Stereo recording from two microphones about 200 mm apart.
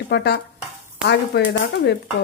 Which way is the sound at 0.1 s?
55° left (ahead or behind).